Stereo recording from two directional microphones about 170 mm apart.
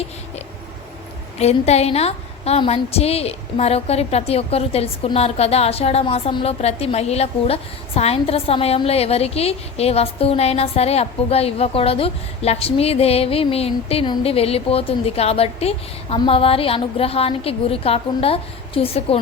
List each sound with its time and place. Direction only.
1.4 s a woman's voice: 40° left (ahead or behind)